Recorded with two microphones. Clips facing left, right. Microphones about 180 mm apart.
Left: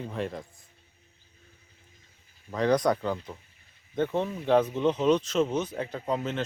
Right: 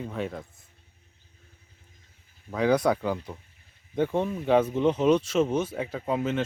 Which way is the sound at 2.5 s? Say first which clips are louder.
Right 1 dB; 5° right (ahead or behind).